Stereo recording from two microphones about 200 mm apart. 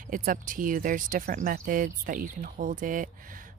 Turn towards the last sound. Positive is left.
turn(degrees=-40)  # may be behind; listen again after turning